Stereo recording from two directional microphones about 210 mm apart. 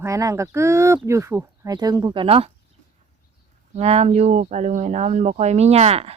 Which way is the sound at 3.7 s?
30° right (ahead or behind).